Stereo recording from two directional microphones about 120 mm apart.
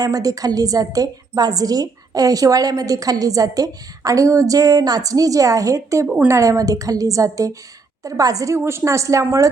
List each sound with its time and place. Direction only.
0.0 s a woman's voice: 30° right (ahead or behind)